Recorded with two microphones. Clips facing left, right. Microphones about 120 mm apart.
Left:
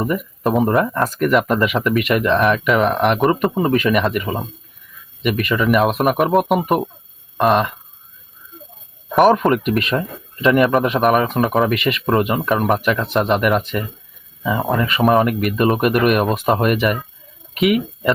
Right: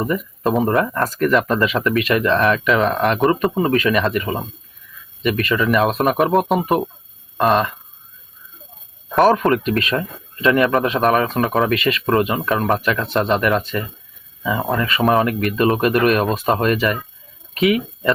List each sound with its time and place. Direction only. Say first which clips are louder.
0.0 s speech: even; 10° left (ahead or behind)
3.6 s speech: left 2 dB; 15° left (ahead or behind)
9.1 s speech: left 1 dB; 15° left (ahead or behind)
10.6 s speech: left 2 dB; centre (ahead or behind)
10.8 s speech: left 1 dB; 15° left (ahead or behind)
11.3 s speech: left 1 dB; centre (ahead or behind)
11.7 s speech: even; 15° left (ahead or behind)
17.6 s speech: left 1 dB; 5° left (ahead or behind)